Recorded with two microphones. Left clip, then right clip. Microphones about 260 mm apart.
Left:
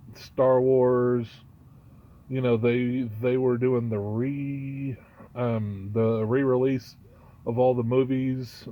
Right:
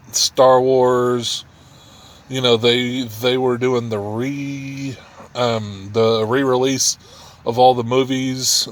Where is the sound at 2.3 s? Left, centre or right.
Centre.